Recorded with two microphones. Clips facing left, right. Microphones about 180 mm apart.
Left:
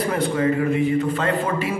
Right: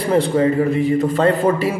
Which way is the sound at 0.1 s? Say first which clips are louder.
Right 8 dB; 30° right (ahead or behind).